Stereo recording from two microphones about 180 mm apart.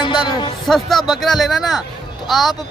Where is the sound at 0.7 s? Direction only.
Centre (ahead or behind).